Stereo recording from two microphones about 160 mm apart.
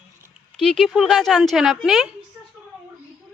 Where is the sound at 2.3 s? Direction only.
15° right (ahead or behind).